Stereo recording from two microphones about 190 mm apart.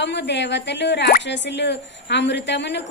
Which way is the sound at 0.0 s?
65° left (ahead or behind).